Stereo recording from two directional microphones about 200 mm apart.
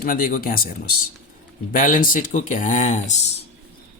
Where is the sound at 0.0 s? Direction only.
45° left (ahead or behind).